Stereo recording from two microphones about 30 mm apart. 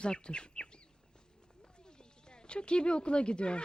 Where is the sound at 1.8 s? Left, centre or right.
Left.